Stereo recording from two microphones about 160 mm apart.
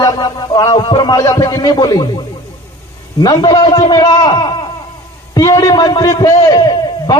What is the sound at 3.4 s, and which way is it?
A man's voice, 25° left (ahead or behind).